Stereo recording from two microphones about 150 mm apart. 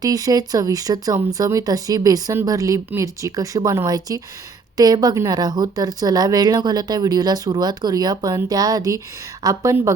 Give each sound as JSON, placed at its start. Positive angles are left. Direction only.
{"t": 0.0, "sound": "speech", "side_deg": -25}